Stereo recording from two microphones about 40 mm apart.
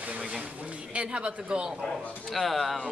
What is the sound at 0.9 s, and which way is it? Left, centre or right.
Speech, right.